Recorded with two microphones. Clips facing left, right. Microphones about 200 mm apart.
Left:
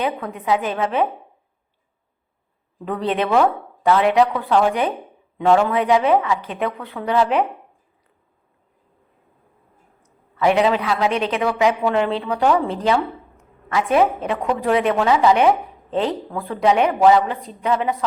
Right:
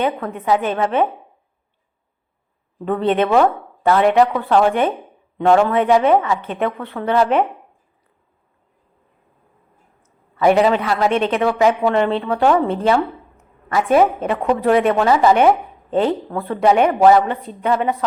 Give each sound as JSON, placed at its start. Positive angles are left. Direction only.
{"t": 0.0, "sound": "speech", "side_deg": 0}
{"t": 2.8, "sound": "speech", "side_deg": 0}
{"t": 10.4, "sound": "speech", "side_deg": 0}